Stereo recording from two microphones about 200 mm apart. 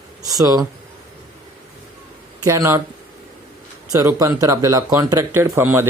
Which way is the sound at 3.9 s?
15° right (ahead or behind).